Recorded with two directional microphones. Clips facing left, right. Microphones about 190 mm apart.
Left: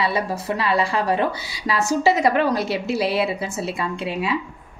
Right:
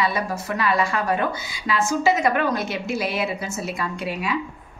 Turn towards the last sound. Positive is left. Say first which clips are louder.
# left 2 dB
turn(degrees=25)  # may be behind; listen again after turning